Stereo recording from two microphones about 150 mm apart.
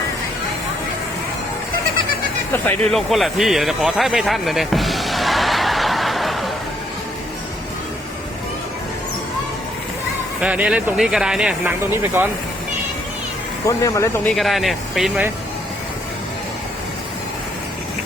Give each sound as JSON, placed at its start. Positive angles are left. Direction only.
{"t": 2.5, "sound": "a sound", "side_deg": 10}
{"t": 10.4, "sound": "speech", "side_deg": -10}
{"t": 11.9, "sound": "speech", "side_deg": -15}
{"t": 13.7, "sound": "speech", "side_deg": 20}
{"t": 14.3, "sound": "speech", "side_deg": 0}